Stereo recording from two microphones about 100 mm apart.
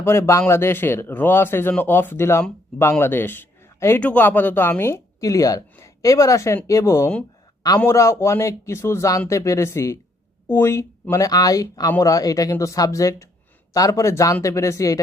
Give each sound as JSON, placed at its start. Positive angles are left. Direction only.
{"t": 0.0, "sound": "a man's voice", "side_deg": 25}
{"t": 5.2, "sound": "a man's voice", "side_deg": 35}